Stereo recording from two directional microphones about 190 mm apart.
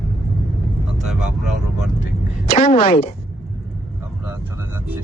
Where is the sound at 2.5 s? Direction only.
50° left (ahead or behind).